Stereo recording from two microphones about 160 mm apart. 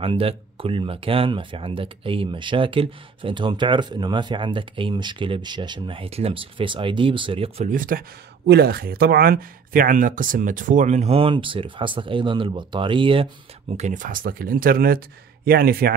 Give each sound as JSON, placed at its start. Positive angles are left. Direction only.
{"t": 0.0, "sound": "speech", "side_deg": -35}
{"t": 7.6, "sound": "speech", "side_deg": -60}
{"t": 8.5, "sound": "speech", "side_deg": -80}